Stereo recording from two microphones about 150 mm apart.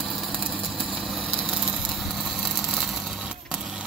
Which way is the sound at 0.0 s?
Centre (ahead or behind).